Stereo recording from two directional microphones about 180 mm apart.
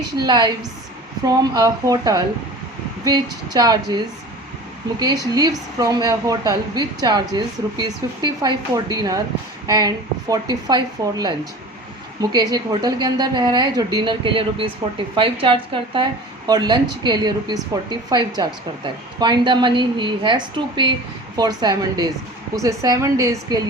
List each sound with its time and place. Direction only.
0.2 s a woman's voice: 20° right (ahead or behind)